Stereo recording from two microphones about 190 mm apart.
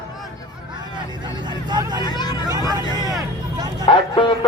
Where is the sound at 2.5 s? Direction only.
20° right (ahead or behind).